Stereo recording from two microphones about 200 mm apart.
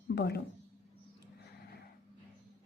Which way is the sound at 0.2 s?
55° left (ahead or behind).